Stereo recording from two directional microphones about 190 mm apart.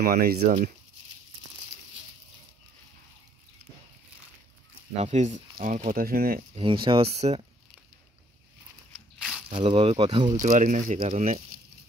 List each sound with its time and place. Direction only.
0.0 s speech: 55° right (ahead or behind)
5.0 s speech: 40° right (ahead or behind)
6.5 s speech: 25° right (ahead or behind)
9.7 s speech: 30° right (ahead or behind)
10.4 s speech: 40° right (ahead or behind)